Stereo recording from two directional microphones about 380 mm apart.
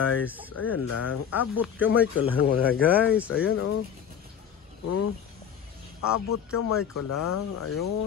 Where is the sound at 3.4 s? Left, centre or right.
Left.